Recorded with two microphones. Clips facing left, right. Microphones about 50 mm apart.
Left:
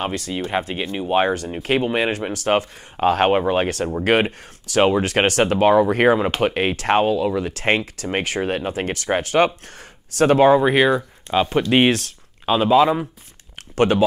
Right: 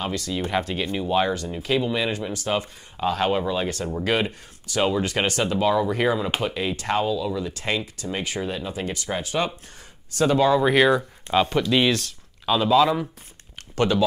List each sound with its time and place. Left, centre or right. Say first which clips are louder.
0.0 s speech: left 2 dB; left
10.6 s speech: left 2 dB; centre
11.6 s speech: left 4 dB; left
12.4 s speech: left 3 dB; left